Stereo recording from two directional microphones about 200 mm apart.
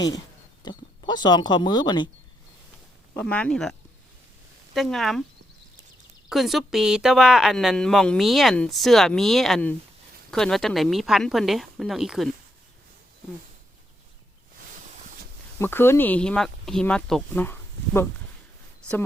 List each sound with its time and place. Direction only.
0.6 s speech: 20° left (ahead or behind)
3.2 s speech: 5° left (ahead or behind)
6.2 s speech: centre (ahead or behind)
14.8 s a sound: 40° right (ahead or behind)
15.5 s speech: 10° left (ahead or behind)